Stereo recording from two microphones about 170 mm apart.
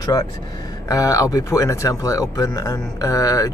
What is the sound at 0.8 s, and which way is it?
Speech, 20° left (ahead or behind).